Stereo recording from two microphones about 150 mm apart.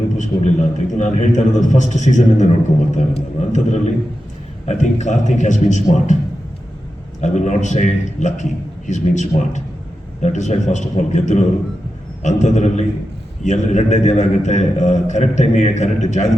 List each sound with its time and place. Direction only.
0.2 s a man's voice: 55° left (ahead or behind)
7.2 s a man's voice: 50° left (ahead or behind)